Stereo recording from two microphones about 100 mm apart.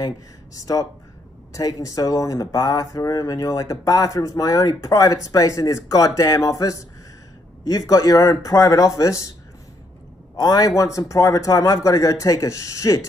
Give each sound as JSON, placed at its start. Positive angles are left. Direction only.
{"t": 0.6, "sound": "speech", "side_deg": 35}
{"t": 10.3, "sound": "speech", "side_deg": 40}